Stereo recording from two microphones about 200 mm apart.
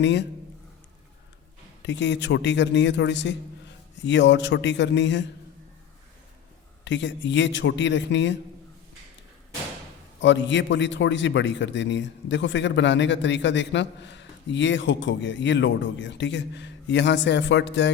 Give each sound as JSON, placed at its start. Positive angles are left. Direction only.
{"t": 0.0, "sound": "a man's voice", "side_deg": 60}
{"t": 1.8, "sound": "a man's voice", "side_deg": 60}
{"t": 6.8, "sound": "a man's voice", "side_deg": 65}
{"t": 10.2, "sound": "a man's voice", "side_deg": 65}